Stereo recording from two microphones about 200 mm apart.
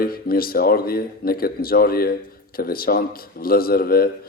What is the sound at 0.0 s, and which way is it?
A man's voice, 50° left (ahead or behind).